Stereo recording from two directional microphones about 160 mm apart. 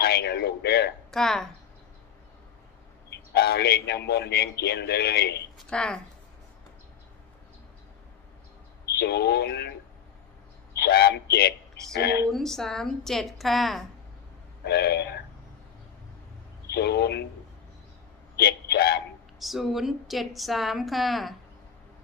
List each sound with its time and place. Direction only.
0.0 s a man's voice: 90° left
1.1 s a woman's voice: 5° left (ahead or behind)
3.1 s speech: 80° left
5.5 s a woman's voice: 5° left (ahead or behind)
9.0 s speech: 90° left
10.8 s a man's voice: 80° left
12.3 s a woman's voice: 5° left (ahead or behind)
14.6 s speech: 90° left
16.7 s speech: 90° left
18.3 s a man's voice: 80° left
19.4 s a woman's voice: centre (ahead or behind)